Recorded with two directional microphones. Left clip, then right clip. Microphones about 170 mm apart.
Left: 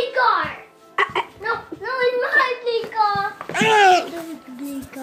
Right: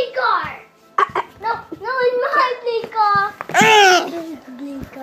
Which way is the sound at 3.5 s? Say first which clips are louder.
Right 3 dB; 50° right (ahead or behind).